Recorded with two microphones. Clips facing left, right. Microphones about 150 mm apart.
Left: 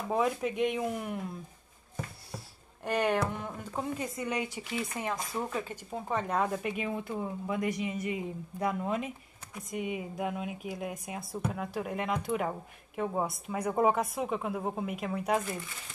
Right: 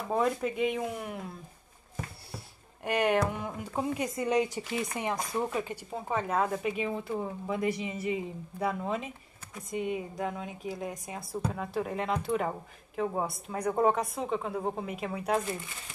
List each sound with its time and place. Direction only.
0.1 s speech: centre (ahead or behind)
2.8 s speech: 10° right (ahead or behind)
4.2 s speech: 35° right (ahead or behind)
4.9 s speech: 15° right (ahead or behind); by 15.4 s centre (ahead or behind)